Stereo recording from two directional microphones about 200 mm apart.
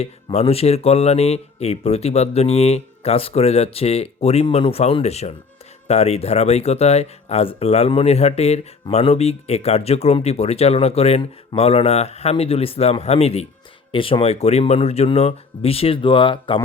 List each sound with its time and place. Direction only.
0.0 s speech: 30° left (ahead or behind)